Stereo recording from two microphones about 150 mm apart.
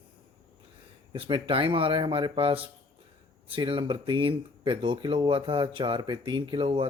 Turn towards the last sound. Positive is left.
turn(degrees=-35)  # may be behind; listen again after turning